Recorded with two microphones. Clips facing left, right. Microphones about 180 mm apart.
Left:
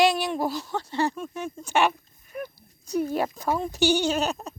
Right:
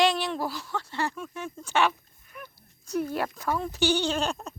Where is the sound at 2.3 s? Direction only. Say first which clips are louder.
Left 10 dB; 50° left (ahead or behind).